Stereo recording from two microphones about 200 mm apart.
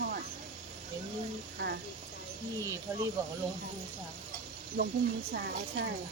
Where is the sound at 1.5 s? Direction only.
55° right (ahead or behind).